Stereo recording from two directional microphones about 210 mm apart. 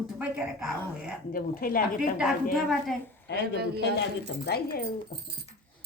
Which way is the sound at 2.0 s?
Centre (ahead or behind).